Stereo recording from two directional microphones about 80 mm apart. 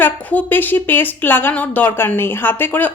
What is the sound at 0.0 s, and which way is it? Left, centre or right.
A woman's voice, left.